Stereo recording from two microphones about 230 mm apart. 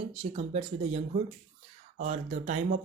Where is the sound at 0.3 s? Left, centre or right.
Right.